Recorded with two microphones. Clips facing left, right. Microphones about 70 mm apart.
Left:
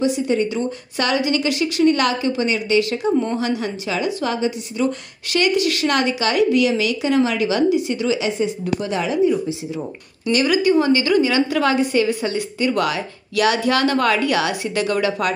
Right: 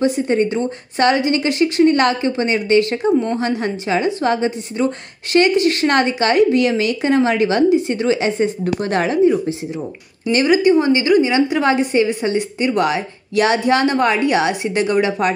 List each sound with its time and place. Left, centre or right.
0.0 s a woman's voice: right
10.3 s a woman's voice: right